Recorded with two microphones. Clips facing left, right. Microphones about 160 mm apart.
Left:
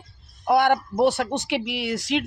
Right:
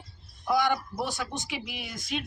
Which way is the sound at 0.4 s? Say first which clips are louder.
Left 7 dB; 60° left (ahead or behind).